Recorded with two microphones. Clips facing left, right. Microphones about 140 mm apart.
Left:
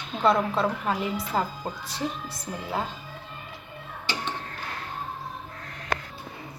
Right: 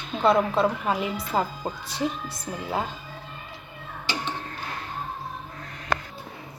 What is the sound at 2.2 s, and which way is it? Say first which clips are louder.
Speech: right 2 dB; 25° right (ahead or behind).